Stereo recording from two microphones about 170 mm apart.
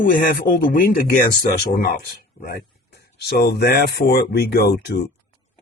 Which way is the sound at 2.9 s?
70° left (ahead or behind).